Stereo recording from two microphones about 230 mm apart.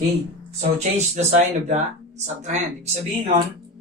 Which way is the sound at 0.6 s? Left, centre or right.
Right.